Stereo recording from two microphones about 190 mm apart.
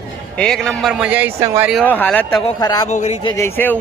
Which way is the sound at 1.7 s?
5° left (ahead or behind).